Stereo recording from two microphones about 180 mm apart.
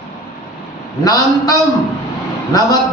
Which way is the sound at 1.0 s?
20° left (ahead or behind).